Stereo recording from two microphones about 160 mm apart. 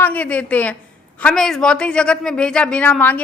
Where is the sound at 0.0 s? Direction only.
10° left (ahead or behind).